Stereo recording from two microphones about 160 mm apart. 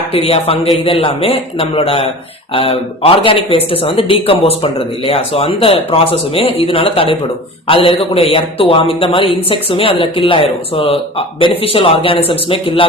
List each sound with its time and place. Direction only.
0.1 s speech: 40° left (ahead or behind)